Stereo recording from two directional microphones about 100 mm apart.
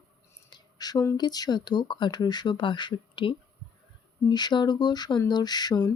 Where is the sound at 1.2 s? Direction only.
40° left (ahead or behind).